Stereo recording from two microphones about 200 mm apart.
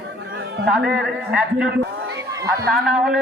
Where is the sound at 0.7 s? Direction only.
5° right (ahead or behind).